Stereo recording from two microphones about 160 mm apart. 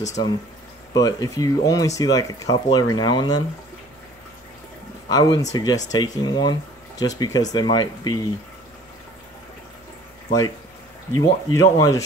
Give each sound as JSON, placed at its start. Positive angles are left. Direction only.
{"t": 0.2, "sound": "speech", "side_deg": 25}
{"t": 5.0, "sound": "speech", "side_deg": 25}
{"t": 11.1, "sound": "speech", "side_deg": 20}